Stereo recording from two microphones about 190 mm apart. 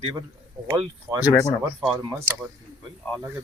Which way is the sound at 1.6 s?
10° right (ahead or behind).